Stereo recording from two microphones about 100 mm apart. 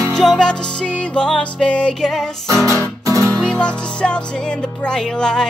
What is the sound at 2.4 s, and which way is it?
Music, 30° right (ahead or behind).